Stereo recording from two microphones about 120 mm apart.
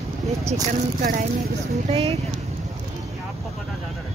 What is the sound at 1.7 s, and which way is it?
Speech, 60° right (ahead or behind).